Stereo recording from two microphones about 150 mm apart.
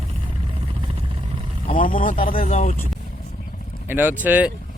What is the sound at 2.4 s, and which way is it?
Speech, 65° left (ahead or behind).